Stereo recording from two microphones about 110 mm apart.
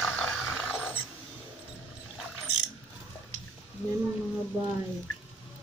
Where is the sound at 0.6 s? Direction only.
5° right (ahead or behind).